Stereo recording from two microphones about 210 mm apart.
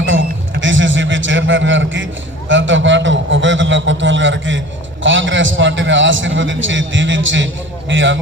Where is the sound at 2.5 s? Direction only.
65° right (ahead or behind).